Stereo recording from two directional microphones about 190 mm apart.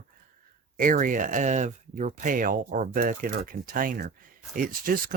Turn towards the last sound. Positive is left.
turn(degrees=-45)  # may be behind; listen again after turning